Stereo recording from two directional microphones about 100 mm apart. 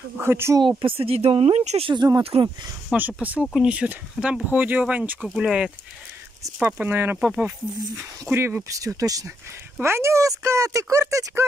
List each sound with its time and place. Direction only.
0.2 s speech: 25° right (ahead or behind)
0.6 s speech: 55° right (ahead or behind); by 1.9 s 90° right
2.3 s speech: 70° right (ahead or behind)
2.9 s speech: 15° right (ahead or behind)
6.6 s speech: 20° right (ahead or behind)
7.2 s speech: 5° right (ahead or behind)
8.3 s speech: 20° right (ahead or behind)
8.6 s speech: 35° right (ahead or behind)
9.8 s speech: 25° right (ahead or behind)